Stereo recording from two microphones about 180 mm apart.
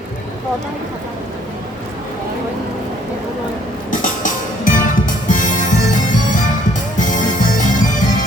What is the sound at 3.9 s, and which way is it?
Music, 45° left (ahead or behind).